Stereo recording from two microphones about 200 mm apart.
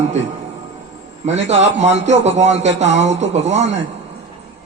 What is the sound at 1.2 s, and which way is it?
A man's voice, 35° right (ahead or behind).